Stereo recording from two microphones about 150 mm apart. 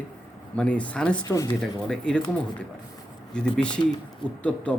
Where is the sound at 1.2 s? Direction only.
25° left (ahead or behind).